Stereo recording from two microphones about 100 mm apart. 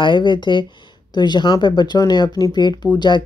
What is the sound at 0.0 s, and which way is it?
Speech, 55° left (ahead or behind).